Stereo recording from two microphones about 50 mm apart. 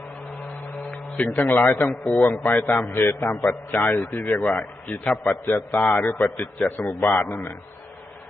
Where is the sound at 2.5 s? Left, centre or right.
Left.